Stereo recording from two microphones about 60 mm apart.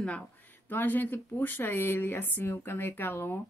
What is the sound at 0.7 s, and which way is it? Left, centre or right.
A woman's voice, left.